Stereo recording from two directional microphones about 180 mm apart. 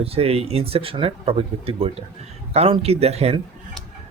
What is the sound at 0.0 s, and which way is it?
Speech, 35° right (ahead or behind).